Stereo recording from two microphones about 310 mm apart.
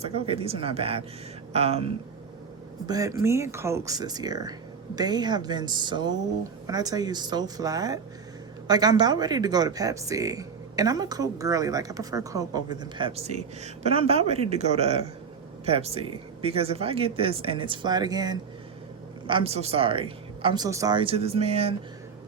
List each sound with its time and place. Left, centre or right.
0.0 s speech: centre